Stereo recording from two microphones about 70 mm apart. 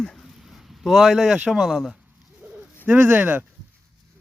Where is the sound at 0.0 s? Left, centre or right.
Centre.